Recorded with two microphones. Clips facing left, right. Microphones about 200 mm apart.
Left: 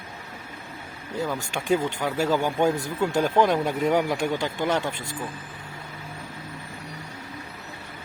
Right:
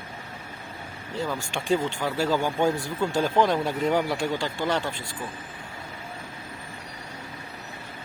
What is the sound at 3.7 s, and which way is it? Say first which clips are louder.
Speech: left 1 dB; 10° left (ahead or behind).